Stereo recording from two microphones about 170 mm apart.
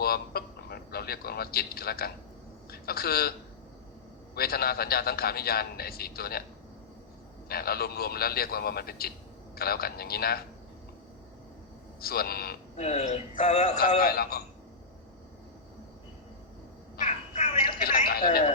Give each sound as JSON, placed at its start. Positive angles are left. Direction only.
{"t": 0.0, "sound": "a man's voice", "side_deg": 65}
{"t": 4.4, "sound": "a man's voice", "side_deg": 65}
{"t": 7.4, "sound": "a man's voice", "side_deg": 65}
{"t": 11.9, "sound": "a man's voice", "side_deg": 65}
{"t": 12.7, "sound": "speech", "side_deg": 40}
{"t": 14.0, "sound": "a man's voice", "side_deg": 65}
{"t": 17.1, "sound": "music", "side_deg": 40}
{"t": 17.7, "sound": "a man's voice", "side_deg": 60}